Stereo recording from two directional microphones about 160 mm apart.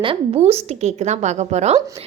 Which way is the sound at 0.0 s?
35° right (ahead or behind).